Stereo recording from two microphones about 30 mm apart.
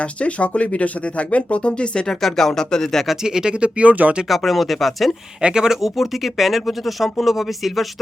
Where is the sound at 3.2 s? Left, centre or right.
Right.